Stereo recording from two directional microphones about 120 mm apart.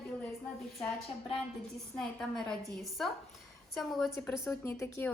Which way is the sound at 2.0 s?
5° left (ahead or behind).